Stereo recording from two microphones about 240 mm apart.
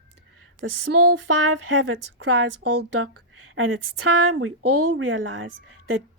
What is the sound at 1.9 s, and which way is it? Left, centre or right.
Speech, right.